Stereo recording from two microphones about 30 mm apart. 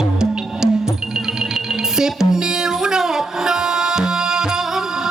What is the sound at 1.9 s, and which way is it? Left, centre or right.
Music, centre.